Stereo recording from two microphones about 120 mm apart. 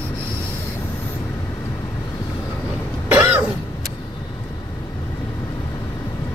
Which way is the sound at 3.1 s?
15° right (ahead or behind).